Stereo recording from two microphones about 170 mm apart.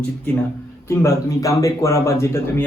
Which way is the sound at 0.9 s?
15° left (ahead or behind).